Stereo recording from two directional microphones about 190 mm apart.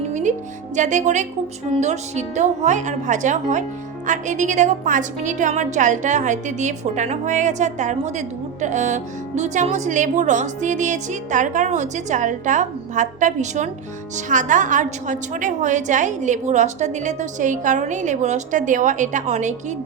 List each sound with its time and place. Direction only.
0.1 s music: 40° right (ahead or behind)
0.8 s a woman's voice: 40° right (ahead or behind)